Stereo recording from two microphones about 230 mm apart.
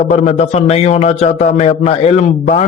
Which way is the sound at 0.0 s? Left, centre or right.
Left.